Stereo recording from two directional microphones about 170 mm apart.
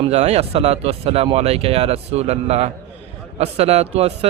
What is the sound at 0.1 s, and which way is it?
A man's voice, 40° right (ahead or behind).